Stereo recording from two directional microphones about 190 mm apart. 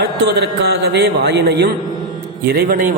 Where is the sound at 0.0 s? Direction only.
60° right (ahead or behind).